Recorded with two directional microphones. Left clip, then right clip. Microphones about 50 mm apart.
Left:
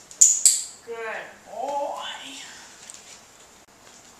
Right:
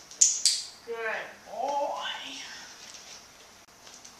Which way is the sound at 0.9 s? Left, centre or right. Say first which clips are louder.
Even; centre.